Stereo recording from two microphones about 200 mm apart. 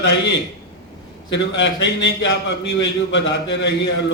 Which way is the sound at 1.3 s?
65° left (ahead or behind).